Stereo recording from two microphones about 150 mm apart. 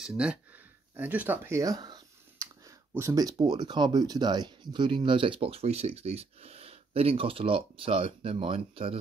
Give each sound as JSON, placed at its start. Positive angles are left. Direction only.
{"t": 0.0, "sound": "speech", "side_deg": -5}